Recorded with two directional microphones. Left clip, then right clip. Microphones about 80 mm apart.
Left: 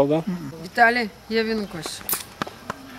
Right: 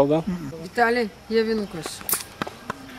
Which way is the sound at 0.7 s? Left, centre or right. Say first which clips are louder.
Left 3 dB; left.